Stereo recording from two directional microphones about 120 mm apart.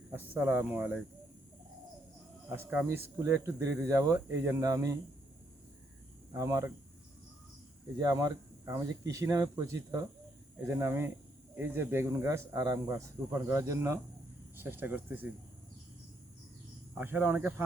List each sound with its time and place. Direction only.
0.1 s speech: 15° right (ahead or behind)
2.5 s speech: 15° right (ahead or behind)
6.3 s speech: 25° right (ahead or behind)
7.9 s speech: 30° right (ahead or behind)
17.0 s speech: 15° right (ahead or behind)